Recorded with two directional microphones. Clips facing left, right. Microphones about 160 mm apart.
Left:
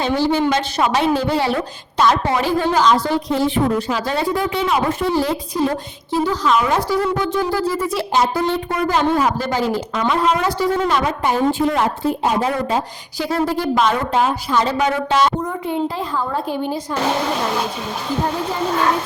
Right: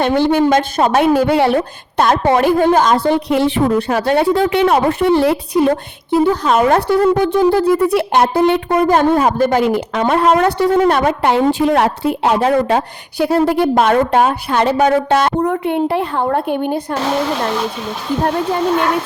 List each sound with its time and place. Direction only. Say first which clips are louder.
0.0 s a woman's voice: right 4 dB; 60° right (ahead or behind)
0.4 s a woman's voice: right 5 dB; 40° right (ahead or behind)
3.2 s a woman's voice: right 4 dB; 70° right (ahead or behind)
6.3 s a woman's voice: right 4 dB; 50° right (ahead or behind)